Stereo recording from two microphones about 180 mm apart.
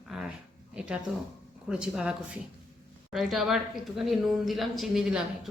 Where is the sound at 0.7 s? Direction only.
5° right (ahead or behind).